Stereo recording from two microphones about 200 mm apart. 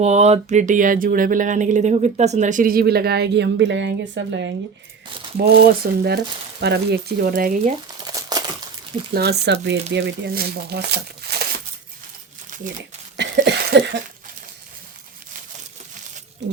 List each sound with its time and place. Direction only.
0.0 s speech: 35° right (ahead or behind); by 4.5 s 65° right (ahead or behind)
5.4 s speech: 50° right (ahead or behind)
7.9 s a sound: 20° right (ahead or behind)
9.1 s speech: 55° right (ahead or behind)
13.1 s cough: 60° right (ahead or behind)
16.4 s speech: 60° right (ahead or behind)